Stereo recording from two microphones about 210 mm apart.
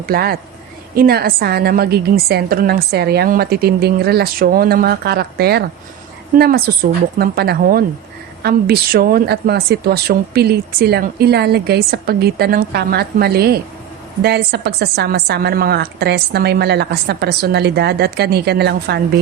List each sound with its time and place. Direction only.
0.0 s a woman's voice: 45° right (ahead or behind)